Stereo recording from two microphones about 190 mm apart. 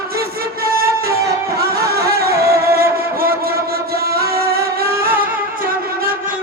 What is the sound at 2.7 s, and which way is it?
Music, 50° right (ahead or behind).